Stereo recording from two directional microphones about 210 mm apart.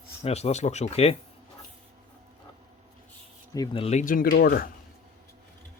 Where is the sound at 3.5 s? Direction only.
20° left (ahead or behind); by 4.6 s 45° left (ahead or behind).